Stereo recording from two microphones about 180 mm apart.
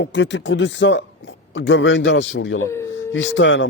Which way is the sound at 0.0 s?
80° left.